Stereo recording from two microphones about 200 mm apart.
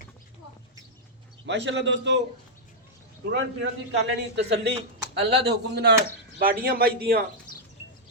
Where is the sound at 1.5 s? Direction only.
65° right (ahead or behind).